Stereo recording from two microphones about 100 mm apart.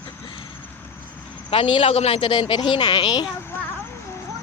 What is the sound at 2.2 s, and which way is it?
Speech, 55° left (ahead or behind).